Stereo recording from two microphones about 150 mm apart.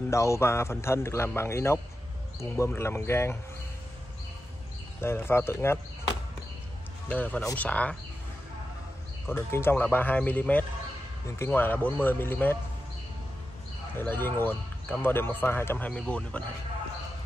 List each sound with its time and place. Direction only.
0.1 s speech: 20° left (ahead or behind)
5.0 s speech: 15° left (ahead or behind)
7.1 s speech: 10° left (ahead or behind)
9.3 s speech: 15° left (ahead or behind)
13.9 s speech: 15° left (ahead or behind)